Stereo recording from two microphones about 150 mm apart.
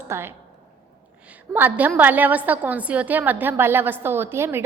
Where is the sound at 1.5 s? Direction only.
10° right (ahead or behind).